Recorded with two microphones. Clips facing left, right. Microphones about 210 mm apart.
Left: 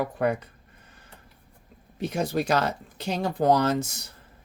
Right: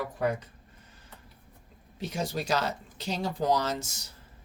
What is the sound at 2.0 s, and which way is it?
Speech, 55° left (ahead or behind).